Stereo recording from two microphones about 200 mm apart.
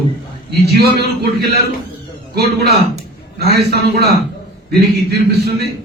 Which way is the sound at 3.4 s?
50° right (ahead or behind).